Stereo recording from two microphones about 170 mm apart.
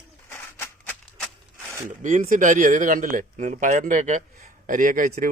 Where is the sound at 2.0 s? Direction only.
50° right (ahead or behind).